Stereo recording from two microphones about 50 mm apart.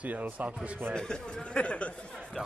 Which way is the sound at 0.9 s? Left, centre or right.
Centre.